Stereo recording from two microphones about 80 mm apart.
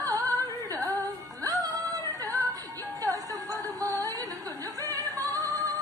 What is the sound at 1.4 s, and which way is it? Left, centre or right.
Music, right.